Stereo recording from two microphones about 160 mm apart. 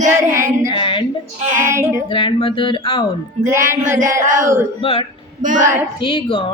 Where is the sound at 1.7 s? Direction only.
15° right (ahead or behind).